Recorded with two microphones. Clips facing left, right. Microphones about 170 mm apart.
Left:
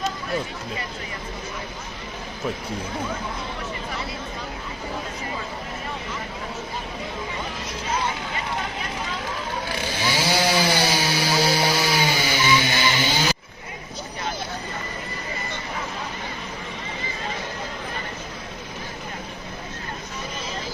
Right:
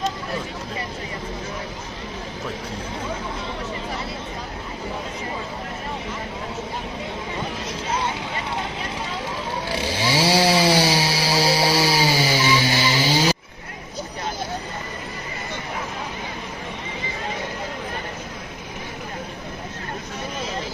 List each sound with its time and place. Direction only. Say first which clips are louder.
9.6 s chainsaw: right 4 dB; 30° right (ahead or behind)